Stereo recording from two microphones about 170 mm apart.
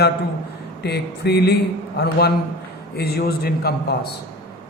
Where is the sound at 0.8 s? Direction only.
75° left (ahead or behind).